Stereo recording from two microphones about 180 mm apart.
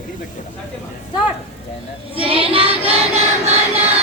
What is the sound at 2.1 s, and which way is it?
Child singing, 30° right (ahead or behind).